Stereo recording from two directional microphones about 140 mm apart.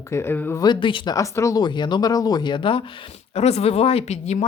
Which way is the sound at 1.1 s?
20° left (ahead or behind).